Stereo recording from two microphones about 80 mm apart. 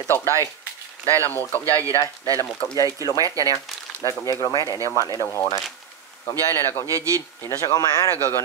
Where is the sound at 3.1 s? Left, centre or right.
Right.